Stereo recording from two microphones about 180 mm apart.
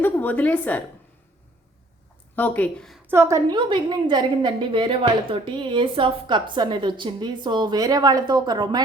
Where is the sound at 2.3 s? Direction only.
10° left (ahead or behind).